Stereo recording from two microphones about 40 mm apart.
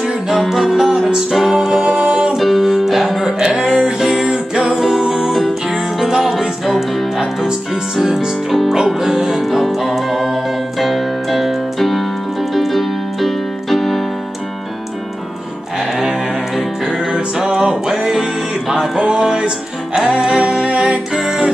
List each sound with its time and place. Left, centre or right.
0.0 s music: centre
1.6 s music: centre
2.3 s music: centre
12.5 s keyboard: centre
16.8 s music: centre
21.1 s music: centre